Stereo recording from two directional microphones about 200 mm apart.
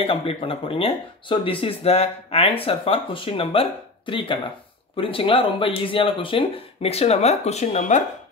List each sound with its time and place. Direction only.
0.0 s speech: 25° left (ahead or behind)